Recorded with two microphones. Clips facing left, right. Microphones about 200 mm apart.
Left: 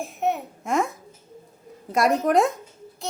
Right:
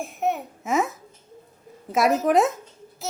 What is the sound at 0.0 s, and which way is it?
A child's voice, centre (ahead or behind).